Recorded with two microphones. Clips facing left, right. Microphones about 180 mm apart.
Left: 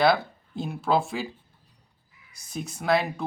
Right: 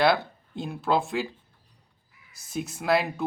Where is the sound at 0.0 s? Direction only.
Centre (ahead or behind).